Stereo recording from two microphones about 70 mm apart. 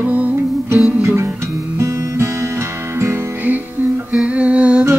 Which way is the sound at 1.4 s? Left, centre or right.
Right.